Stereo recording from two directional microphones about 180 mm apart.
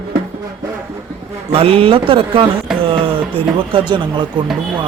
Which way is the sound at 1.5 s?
30° right (ahead or behind).